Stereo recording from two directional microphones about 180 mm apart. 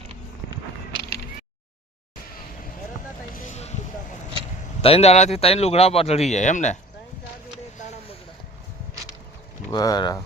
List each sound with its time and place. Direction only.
3.3 s a sound: 45° left (ahead or behind)
4.8 s speech: 35° left (ahead or behind)
9.7 s speech: 20° left (ahead or behind)